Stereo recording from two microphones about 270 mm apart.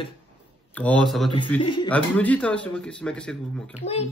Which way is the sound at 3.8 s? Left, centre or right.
Left.